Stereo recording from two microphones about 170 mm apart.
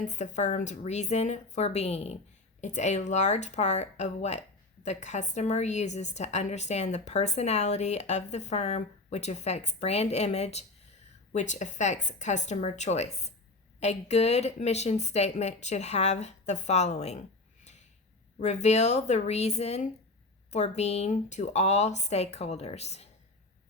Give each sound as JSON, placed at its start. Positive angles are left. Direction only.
{"t": 0.0, "sound": "speech", "side_deg": 45}